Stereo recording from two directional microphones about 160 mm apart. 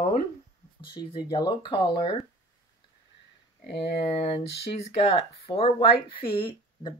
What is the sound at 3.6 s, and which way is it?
Speech, 90° left.